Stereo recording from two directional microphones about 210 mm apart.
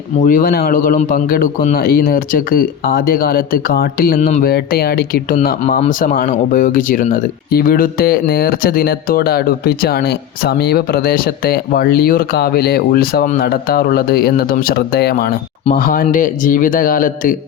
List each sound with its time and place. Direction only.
0.2 s a man's voice: 40° left (ahead or behind)